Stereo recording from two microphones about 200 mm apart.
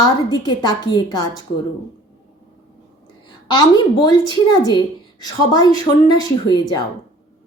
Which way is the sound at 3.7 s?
20° left (ahead or behind).